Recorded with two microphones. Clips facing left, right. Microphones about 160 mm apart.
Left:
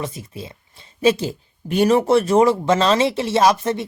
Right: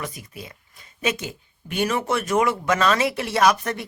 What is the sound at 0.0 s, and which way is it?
A woman's voice, 25° left (ahead or behind).